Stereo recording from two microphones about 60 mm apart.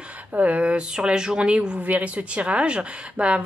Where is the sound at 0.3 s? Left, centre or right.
Right.